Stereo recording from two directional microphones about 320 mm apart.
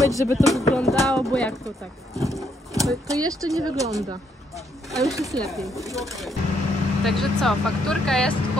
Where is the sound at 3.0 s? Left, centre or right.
Centre.